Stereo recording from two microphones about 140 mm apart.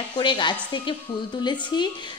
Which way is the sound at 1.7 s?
30° left (ahead or behind).